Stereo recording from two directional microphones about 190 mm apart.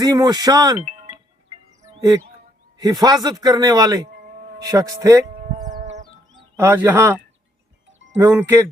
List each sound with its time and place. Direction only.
0.0 s a man's voice: 20° right (ahead or behind)
0.9 s music: 30° right (ahead or behind)
2.7 s a man's voice: 20° right (ahead or behind)
5.3 s livestock: 45° right (ahead or behind)
5.6 s chicken: 40° right (ahead or behind)
6.6 s speech: 10° right (ahead or behind)
7.9 s wind chime: 75° right (ahead or behind)
8.2 s speech: 15° right (ahead or behind)